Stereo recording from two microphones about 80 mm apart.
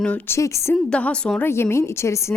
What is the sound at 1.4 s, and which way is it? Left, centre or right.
Speech, left.